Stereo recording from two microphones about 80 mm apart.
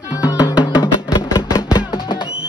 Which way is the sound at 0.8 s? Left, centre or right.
Left.